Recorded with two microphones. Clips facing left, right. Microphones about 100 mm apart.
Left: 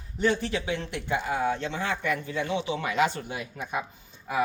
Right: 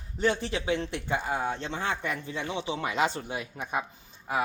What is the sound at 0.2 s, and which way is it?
Speech, 25° right (ahead or behind).